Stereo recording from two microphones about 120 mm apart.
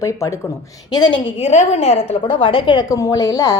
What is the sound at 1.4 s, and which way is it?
Speech, 60° left (ahead or behind).